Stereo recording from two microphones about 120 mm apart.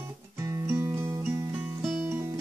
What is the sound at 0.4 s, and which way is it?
Music, 25° right (ahead or behind).